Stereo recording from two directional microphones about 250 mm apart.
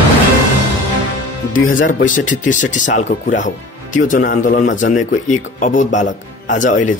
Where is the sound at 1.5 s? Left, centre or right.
Left.